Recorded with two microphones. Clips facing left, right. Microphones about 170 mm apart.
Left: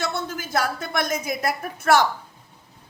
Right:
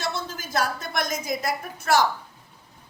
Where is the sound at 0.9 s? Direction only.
60° left (ahead or behind).